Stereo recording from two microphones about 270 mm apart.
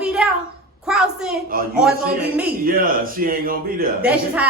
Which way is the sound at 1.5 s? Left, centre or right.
Right.